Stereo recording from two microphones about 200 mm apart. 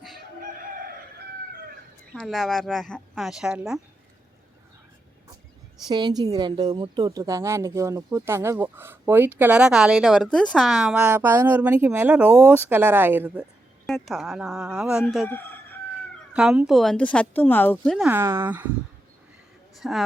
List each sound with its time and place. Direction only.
0.2 s chicken: 45° right (ahead or behind)
2.1 s speech: centre (ahead or behind)
5.9 s a woman's voice: 20° right (ahead or behind)
13.8 s speech: centre (ahead or behind)
15.3 s chicken: 10° left (ahead or behind)
16.3 s speech: 5° right (ahead or behind)
18.1 s a woman's voice: 10° right (ahead or behind)
19.7 s speech: centre (ahead or behind)